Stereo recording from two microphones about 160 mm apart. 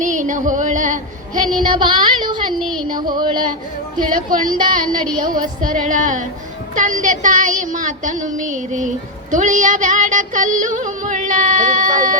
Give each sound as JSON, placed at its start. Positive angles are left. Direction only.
{"t": 0.0, "sound": "a sound", "side_deg": -50}
{"t": 1.5, "sound": "child singing", "side_deg": -30}
{"t": 2.6, "sound": "speech", "side_deg": 0}
{"t": 2.9, "sound": "child singing", "side_deg": -25}
{"t": 3.9, "sound": "a woman's voice", "side_deg": -60}
{"t": 6.7, "sound": "music", "side_deg": -55}